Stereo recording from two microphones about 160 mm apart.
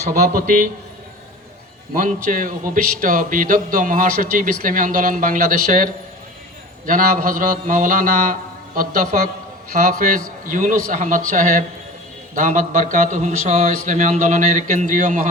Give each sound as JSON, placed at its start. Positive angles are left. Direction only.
{"t": 0.3, "sound": "speech", "side_deg": -60}
{"t": 2.0, "sound": "a man's voice", "side_deg": -55}